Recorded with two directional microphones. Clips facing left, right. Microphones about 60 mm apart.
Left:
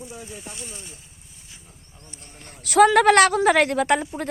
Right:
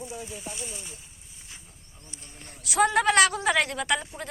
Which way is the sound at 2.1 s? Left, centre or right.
Left.